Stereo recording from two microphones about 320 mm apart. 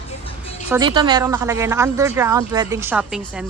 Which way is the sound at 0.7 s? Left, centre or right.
Centre.